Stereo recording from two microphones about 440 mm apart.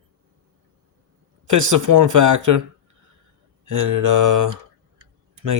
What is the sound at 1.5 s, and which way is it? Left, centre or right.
Speech, right.